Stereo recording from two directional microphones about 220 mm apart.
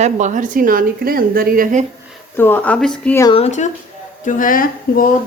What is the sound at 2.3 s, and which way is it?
Speech, 10° left (ahead or behind).